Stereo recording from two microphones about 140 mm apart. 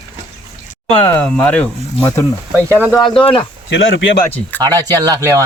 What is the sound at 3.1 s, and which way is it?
Speech, 40° left (ahead or behind).